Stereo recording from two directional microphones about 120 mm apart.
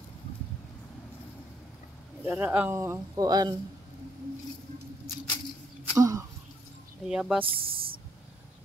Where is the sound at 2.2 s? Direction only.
15° right (ahead or behind); by 3.5 s 35° right (ahead or behind).